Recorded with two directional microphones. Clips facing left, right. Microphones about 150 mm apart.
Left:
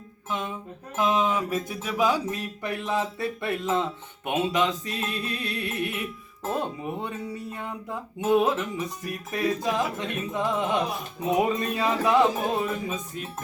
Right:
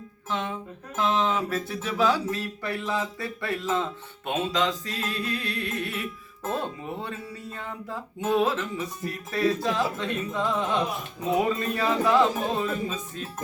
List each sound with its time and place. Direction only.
0.3 s speech: 10° left (ahead or behind)
4.3 s music: 20° left (ahead or behind)
6.5 s speech: 15° left (ahead or behind)